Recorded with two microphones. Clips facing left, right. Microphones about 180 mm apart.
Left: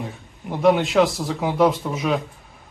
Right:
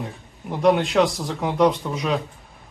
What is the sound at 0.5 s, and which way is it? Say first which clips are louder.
Speech: left 1 dB; centre (ahead or behind).